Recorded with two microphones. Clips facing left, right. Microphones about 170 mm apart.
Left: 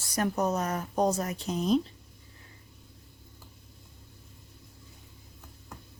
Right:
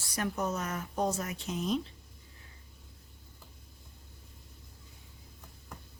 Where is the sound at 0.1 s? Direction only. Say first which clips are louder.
Left 5 dB; 40° left (ahead or behind).